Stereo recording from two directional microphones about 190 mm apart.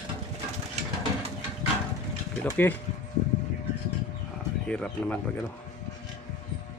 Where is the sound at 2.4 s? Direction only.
10° left (ahead or behind).